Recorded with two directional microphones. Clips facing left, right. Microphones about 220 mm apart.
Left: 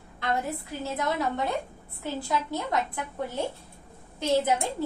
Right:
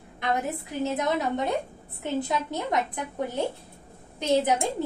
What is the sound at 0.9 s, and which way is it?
A woman's voice, 20° right (ahead or behind).